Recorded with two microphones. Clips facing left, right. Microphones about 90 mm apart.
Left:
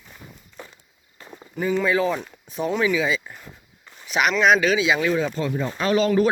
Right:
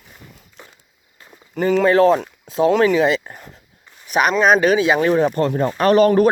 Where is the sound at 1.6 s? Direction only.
65° right (ahead or behind).